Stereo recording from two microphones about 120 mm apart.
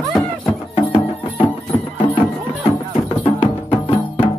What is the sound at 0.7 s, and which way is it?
Music, 50° left (ahead or behind).